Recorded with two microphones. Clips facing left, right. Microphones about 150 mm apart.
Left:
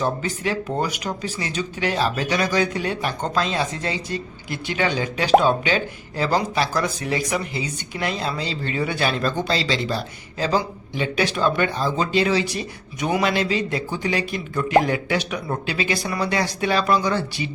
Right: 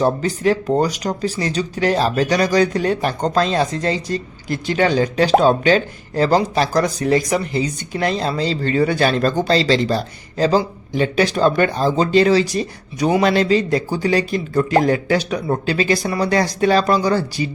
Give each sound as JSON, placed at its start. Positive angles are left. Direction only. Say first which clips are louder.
{"t": 0.0, "sound": "speech", "louder": "right 7 dB", "side_deg": -40}